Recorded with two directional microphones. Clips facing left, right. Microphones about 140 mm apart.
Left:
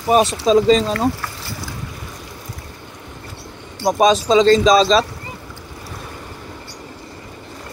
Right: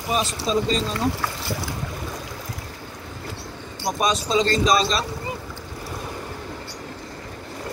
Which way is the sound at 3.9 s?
90° left.